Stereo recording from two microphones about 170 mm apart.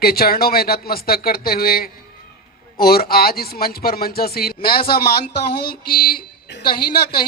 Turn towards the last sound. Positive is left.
turn(degrees=65)  # may be behind; listen again after turning